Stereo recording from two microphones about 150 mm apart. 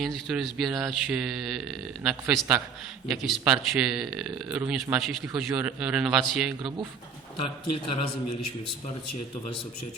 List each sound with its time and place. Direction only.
0.0 s a man's voice: centre (ahead or behind)
6.6 s speech: 30° right (ahead or behind)